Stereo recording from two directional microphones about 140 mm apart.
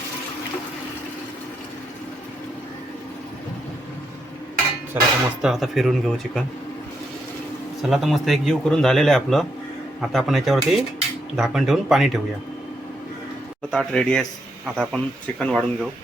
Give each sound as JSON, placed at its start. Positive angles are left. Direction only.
{"t": 4.9, "sound": "speech", "side_deg": -15}
{"t": 5.4, "sound": "a man's voice", "side_deg": 0}
{"t": 7.8, "sound": "a man's voice", "side_deg": 0}
{"t": 13.7, "sound": "a man's voice", "side_deg": 5}